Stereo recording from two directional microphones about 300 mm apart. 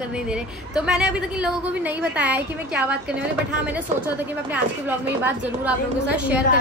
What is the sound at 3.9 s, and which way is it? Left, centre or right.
Speech, right.